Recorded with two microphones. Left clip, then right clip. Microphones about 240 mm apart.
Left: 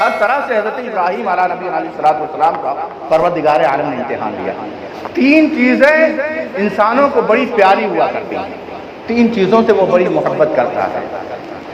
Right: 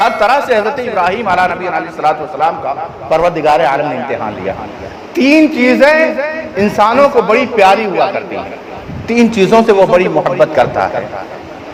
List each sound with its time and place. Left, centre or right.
0.2 s a man's voice: right